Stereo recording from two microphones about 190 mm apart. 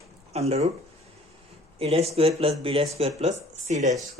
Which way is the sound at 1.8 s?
30° right (ahead or behind).